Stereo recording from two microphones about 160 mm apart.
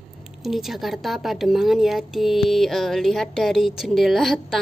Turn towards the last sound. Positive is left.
turn(degrees=0)  # may be behind; listen again after turning